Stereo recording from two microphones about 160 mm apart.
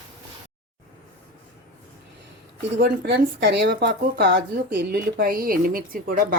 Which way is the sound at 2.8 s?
90° right.